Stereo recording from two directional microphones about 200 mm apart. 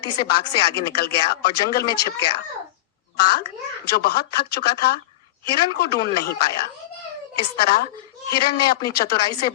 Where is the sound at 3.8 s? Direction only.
50° left (ahead or behind).